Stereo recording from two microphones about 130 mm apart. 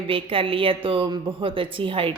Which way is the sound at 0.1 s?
45° right (ahead or behind).